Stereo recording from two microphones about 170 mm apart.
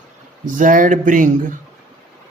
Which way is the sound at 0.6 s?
50° right (ahead or behind).